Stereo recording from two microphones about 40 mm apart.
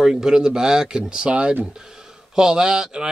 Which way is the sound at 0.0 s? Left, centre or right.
Centre.